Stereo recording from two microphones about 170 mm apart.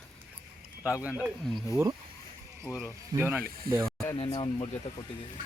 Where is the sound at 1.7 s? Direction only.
20° right (ahead or behind).